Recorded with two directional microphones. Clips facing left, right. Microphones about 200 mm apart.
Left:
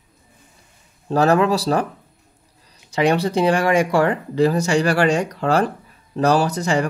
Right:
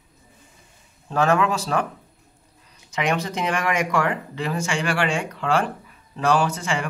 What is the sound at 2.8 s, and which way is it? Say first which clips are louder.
Speech: left 6 dB; 35° left (ahead or behind).